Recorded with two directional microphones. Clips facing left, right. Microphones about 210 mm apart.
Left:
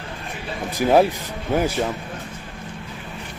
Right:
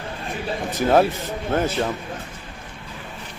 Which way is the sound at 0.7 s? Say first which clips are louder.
Left 1 dB; 10° left (ahead or behind).